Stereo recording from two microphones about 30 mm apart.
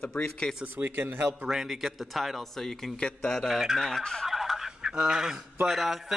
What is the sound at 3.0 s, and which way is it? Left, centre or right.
Speech, left.